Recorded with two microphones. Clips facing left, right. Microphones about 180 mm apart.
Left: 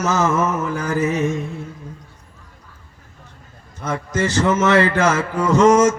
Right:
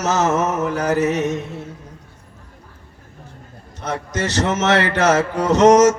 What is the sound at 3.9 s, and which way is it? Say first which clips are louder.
A man's voice: left 2 dB; 70° right (ahead or behind).